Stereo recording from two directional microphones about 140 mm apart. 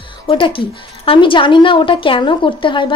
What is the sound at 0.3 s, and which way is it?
A woman's voice, 40° left (ahead or behind).